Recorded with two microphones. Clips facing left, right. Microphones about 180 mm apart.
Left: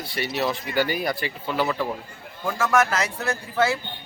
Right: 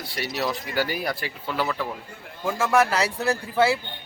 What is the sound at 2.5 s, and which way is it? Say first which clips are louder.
A man's voice: right 1 dB; 30° right (ahead or behind).